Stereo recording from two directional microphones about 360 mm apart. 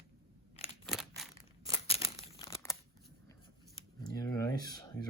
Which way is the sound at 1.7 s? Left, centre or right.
Centre.